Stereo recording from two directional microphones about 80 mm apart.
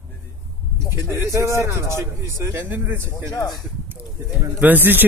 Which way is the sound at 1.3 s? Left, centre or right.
Right.